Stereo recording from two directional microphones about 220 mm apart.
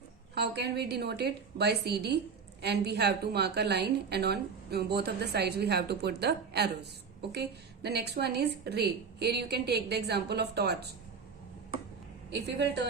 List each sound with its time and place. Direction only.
0.3 s a woman's voice: 50° right (ahead or behind)
12.3 s a woman's voice: 50° right (ahead or behind)